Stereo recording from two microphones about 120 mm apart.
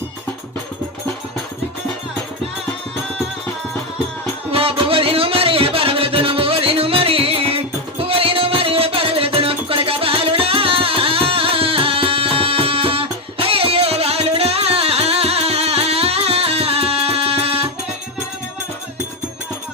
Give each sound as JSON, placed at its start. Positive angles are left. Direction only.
{"t": 4.5, "sound": "music", "side_deg": -50}